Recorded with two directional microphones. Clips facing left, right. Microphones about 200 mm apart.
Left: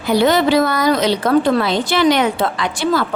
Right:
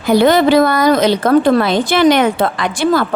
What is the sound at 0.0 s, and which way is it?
A woman's voice, 50° right (ahead or behind).